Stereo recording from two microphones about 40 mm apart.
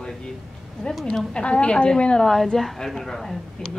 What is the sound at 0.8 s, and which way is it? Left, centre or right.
A woman's voice, left.